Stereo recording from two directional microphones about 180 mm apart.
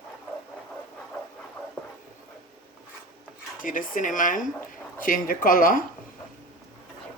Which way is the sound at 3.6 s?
50° left (ahead or behind).